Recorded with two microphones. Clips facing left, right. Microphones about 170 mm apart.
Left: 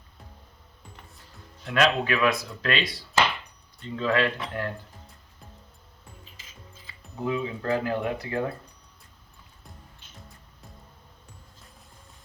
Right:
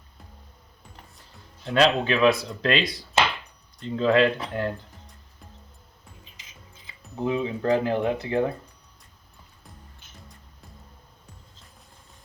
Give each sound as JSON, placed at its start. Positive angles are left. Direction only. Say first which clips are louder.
{"t": 1.6, "sound": "speech", "louder": "right 3 dB", "side_deg": -30}
{"t": 6.3, "sound": "speech", "louder": "left 2 dB", "side_deg": -20}